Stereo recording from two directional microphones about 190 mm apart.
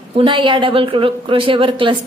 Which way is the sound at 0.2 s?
25° right (ahead or behind).